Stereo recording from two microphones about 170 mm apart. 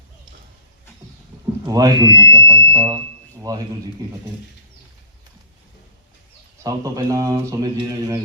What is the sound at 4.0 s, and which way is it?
Speech, 25° right (ahead or behind).